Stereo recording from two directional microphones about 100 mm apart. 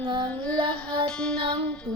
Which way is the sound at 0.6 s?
60° right (ahead or behind).